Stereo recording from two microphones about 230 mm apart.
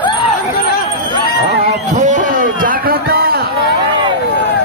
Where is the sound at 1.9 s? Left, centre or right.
Right.